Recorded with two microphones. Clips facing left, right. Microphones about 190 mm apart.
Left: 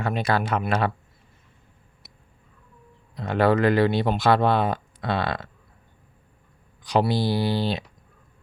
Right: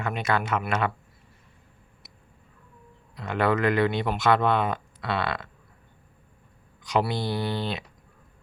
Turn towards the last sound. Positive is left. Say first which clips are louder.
# left 5 dB
turn(degrees=35)  # may be behind; listen again after turning